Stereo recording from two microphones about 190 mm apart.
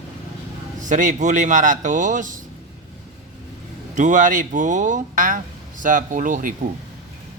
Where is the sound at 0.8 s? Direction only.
40° right (ahead or behind).